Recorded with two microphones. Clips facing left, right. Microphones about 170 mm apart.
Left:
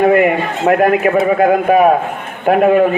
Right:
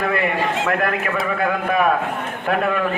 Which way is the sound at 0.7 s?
35° left (ahead or behind).